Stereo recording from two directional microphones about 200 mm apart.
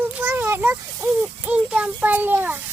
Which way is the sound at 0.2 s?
10° right (ahead or behind).